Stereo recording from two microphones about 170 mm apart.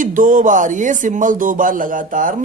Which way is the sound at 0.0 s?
50° right (ahead or behind).